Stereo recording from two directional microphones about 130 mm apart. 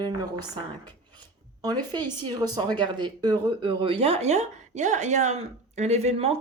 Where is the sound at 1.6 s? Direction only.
30° right (ahead or behind).